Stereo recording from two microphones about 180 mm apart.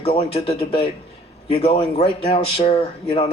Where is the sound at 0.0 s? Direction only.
35° left (ahead or behind).